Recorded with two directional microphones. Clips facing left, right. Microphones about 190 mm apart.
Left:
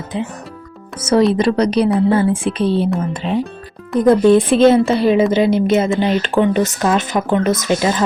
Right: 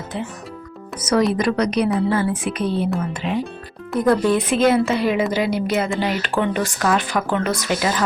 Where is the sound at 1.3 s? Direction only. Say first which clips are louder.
Left 5 dB; 30° left (ahead or behind).